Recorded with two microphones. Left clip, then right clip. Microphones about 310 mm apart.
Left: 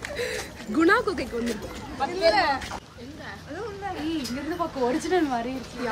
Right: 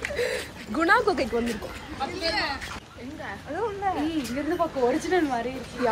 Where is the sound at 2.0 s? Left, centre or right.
Left.